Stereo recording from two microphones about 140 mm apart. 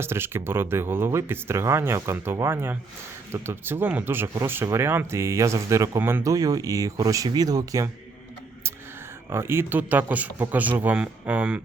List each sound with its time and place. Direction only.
0.0 s speech: 15° right (ahead or behind)
9.3 s speech: 15° right (ahead or behind)